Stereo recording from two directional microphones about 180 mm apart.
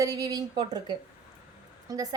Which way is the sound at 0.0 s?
20° right (ahead or behind).